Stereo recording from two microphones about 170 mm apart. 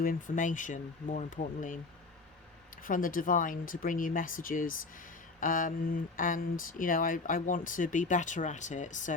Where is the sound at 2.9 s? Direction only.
55° left (ahead or behind).